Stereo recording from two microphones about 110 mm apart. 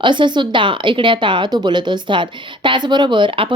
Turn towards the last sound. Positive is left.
turn(degrees=-50)  # may be behind; listen again after turning